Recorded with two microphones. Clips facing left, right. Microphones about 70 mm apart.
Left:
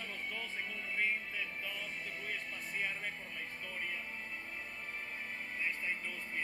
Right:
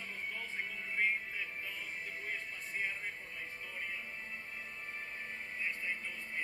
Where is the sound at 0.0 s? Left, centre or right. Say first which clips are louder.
Even; left.